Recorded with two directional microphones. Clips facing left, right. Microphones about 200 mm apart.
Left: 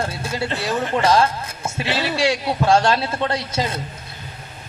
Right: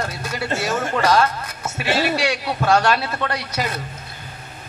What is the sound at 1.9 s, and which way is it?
Speech, 45° right (ahead or behind).